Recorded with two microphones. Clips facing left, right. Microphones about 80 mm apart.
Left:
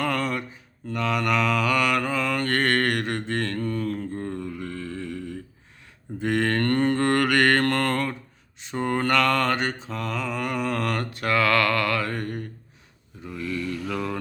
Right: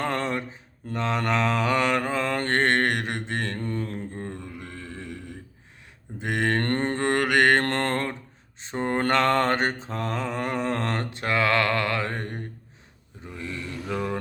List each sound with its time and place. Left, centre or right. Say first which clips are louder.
0.0 s mantra: left 1 dB; right
6.7 s mantra: left 3 dB; right